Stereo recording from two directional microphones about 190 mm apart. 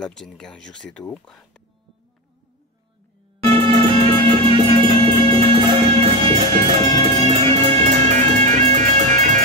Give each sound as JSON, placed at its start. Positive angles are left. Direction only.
{"t": 0.0, "sound": "speech", "side_deg": 5}
{"t": 3.5, "sound": "music", "side_deg": -25}